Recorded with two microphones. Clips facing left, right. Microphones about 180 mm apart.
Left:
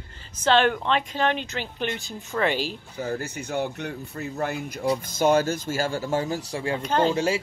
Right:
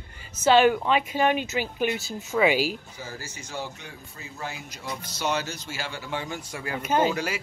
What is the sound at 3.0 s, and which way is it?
Speech, 60° left (ahead or behind).